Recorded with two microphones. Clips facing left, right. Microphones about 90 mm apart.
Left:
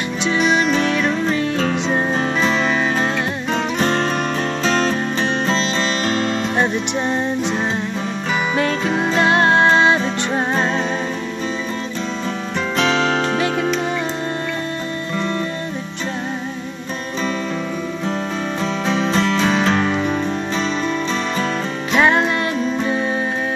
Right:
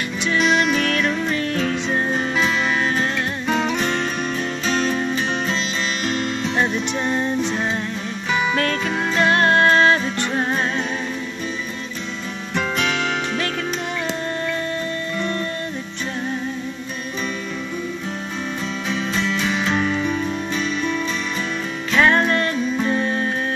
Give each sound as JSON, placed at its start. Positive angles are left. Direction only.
{"t": 0.4, "sound": "music", "side_deg": 0}
{"t": 0.7, "sound": "music", "side_deg": 25}
{"t": 1.6, "sound": "music", "side_deg": 35}
{"t": 3.8, "sound": "music", "side_deg": 40}
{"t": 6.6, "sound": "music", "side_deg": 20}
{"t": 12.7, "sound": "music", "side_deg": 30}
{"t": 18.9, "sound": "music", "side_deg": 35}
{"t": 21.9, "sound": "music", "side_deg": 15}